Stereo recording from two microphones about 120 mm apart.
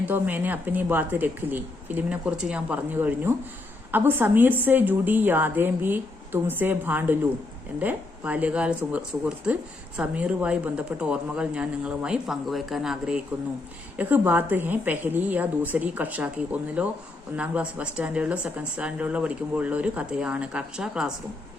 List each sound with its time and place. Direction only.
0.0 s speech: 15° right (ahead or behind)